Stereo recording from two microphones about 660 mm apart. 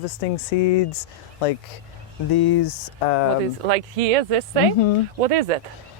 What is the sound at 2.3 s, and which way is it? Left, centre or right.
Speech, left.